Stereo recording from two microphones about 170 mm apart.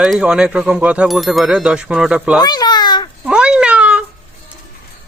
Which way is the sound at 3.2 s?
5° right (ahead or behind).